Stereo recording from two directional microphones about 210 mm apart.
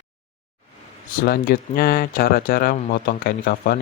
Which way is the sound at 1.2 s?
45° left (ahead or behind).